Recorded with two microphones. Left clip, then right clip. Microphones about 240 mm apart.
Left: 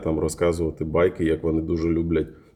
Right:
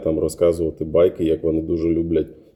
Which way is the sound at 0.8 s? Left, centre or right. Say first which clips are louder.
Right 5 dB; centre.